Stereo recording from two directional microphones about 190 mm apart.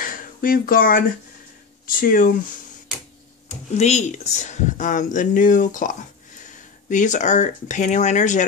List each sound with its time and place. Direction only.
0.0 s a sound: 45° left (ahead or behind)
1.9 s speech: 45° left (ahead or behind)
3.4 s speech: 35° left (ahead or behind)